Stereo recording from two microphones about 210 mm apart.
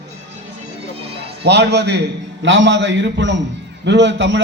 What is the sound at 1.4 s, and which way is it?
A man's voice, 55° right (ahead or behind).